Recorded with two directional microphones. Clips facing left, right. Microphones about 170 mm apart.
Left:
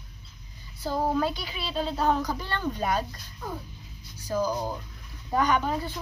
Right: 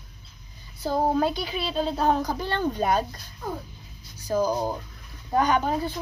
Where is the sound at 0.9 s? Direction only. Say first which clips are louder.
Right 3 dB; 45° right (ahead or behind).